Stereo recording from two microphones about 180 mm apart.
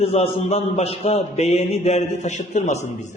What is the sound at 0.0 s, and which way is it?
A man's voice, 35° left (ahead or behind).